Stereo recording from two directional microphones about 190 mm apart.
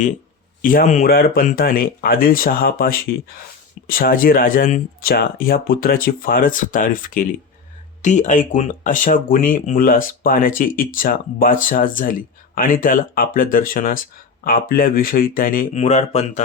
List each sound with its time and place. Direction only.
0.6 s speech: 45° left (ahead or behind)